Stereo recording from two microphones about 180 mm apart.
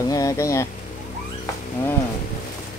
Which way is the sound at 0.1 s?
20° left (ahead or behind).